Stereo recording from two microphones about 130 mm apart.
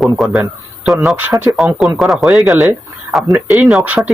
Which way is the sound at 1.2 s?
15° right (ahead or behind).